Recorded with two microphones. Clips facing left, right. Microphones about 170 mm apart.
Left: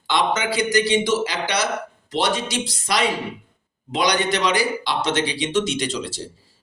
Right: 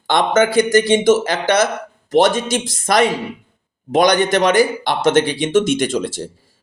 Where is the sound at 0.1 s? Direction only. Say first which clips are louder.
Right 7 dB; 50° right (ahead or behind).